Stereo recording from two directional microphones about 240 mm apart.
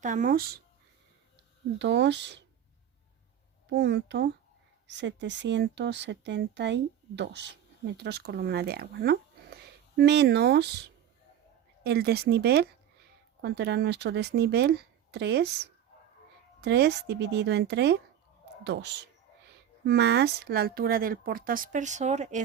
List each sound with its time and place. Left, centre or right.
0.0 s speech: right
1.8 s speech: right
3.7 s speech: right
11.8 s speech: right
16.6 s speech: right